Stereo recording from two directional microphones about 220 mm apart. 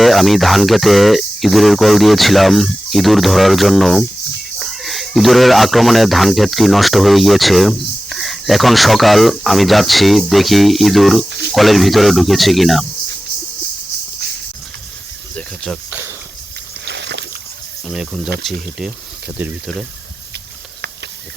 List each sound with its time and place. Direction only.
0.0 s speech: centre (ahead or behind)
11.3 s speech: 50° right (ahead or behind)
11.5 s speech: centre (ahead or behind)
15.4 s speech: centre (ahead or behind)
16.8 s a sound: 50° right (ahead or behind)
17.8 s speech: centre (ahead or behind)
19.4 s speech: 5° right (ahead or behind)